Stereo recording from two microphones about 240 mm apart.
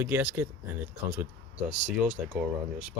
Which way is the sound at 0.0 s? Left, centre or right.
Centre.